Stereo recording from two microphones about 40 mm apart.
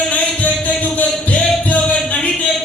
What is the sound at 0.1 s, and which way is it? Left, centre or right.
Music, left.